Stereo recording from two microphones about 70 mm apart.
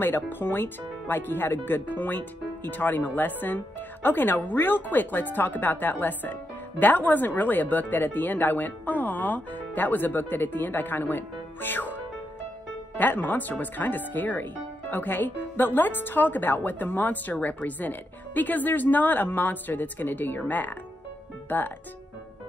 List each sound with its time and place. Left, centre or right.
0.0 s speech: left